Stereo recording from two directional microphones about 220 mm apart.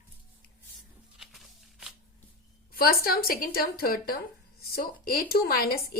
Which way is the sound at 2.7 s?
45° left (ahead or behind).